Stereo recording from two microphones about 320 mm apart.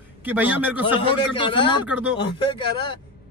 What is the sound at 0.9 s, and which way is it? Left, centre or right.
Speech, centre.